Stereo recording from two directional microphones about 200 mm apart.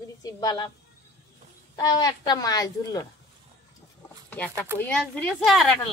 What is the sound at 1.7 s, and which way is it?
Speech, 20° left (ahead or behind).